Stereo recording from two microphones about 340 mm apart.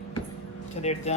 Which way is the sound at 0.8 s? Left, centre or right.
Centre.